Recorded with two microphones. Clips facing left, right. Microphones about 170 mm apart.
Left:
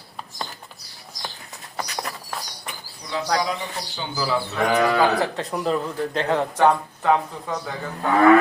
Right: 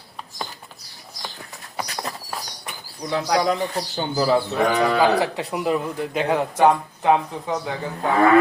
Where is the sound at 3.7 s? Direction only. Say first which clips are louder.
Right 6 dB; 45° right (ahead or behind).